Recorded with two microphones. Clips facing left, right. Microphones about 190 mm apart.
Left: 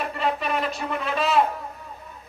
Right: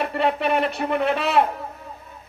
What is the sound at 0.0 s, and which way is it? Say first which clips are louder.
Speech: right 4 dB; 65° right (ahead or behind).